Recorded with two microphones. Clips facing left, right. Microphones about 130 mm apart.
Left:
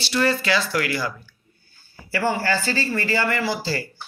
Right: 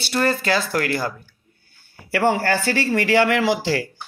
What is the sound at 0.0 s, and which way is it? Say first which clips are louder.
Speech: right 1 dB; 50° right (ahead or behind).